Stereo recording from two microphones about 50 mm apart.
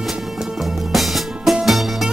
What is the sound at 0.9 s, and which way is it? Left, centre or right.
Music, centre.